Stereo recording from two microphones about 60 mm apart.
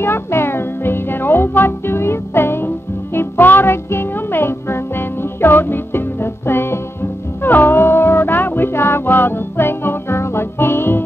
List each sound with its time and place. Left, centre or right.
0.0 s music: left